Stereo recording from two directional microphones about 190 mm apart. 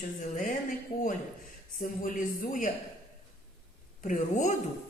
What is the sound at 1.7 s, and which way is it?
Speech, 45° left (ahead or behind).